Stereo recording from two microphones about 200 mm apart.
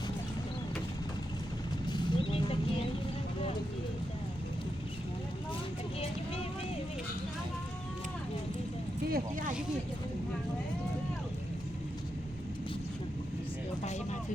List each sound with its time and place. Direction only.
1.9 s vehicle: 25° left (ahead or behind)
9.0 s vehicle: 45° right (ahead or behind)
13.8 s music: 35° left (ahead or behind)